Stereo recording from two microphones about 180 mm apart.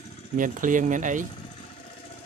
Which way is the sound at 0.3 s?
45° right (ahead or behind).